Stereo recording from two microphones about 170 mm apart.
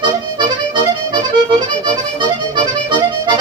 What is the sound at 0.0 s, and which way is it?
Music, 30° right (ahead or behind).